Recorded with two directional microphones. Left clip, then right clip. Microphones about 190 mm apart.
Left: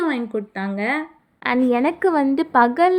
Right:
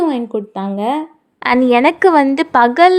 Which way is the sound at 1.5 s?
30° right (ahead or behind).